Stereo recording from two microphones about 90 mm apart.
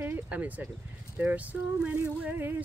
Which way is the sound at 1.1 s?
15° right (ahead or behind).